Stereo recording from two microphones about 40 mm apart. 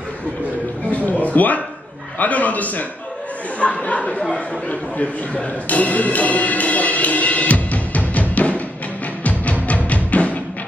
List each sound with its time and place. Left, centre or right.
0.8 s a sound: left
2.1 s speech: left
4.6 s music: left